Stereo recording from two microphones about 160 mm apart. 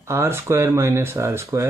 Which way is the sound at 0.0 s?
15° right (ahead or behind).